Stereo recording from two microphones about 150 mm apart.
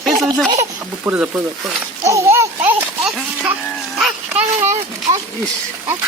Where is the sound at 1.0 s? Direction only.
10° right (ahead or behind).